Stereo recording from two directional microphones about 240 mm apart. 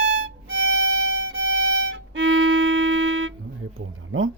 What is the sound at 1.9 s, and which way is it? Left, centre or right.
Music, right.